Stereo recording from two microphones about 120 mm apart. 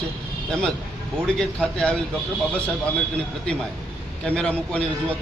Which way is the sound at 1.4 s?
5° left (ahead or behind).